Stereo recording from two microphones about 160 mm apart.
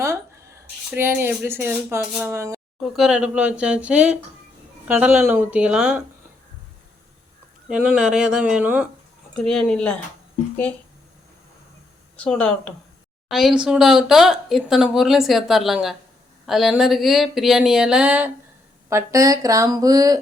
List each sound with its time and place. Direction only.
0.0 s speech: 15° right (ahead or behind)
2.8 s speech: centre (ahead or behind)
7.7 s speech: 5° right (ahead or behind)
9.3 s speech: 5° left (ahead or behind)
12.1 s speech: 10° left (ahead or behind); by 18.3 s 10° right (ahead or behind)
18.9 s speech: 20° right (ahead or behind)